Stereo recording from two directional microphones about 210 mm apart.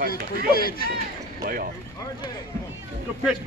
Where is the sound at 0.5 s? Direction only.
45° left (ahead or behind).